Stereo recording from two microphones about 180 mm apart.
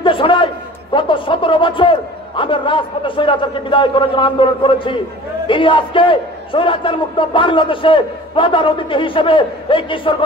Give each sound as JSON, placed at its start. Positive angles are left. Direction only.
{"t": 0.0, "sound": "a man's voice", "side_deg": 30}